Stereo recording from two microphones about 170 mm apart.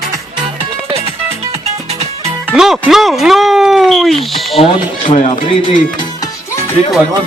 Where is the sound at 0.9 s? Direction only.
35° right (ahead or behind).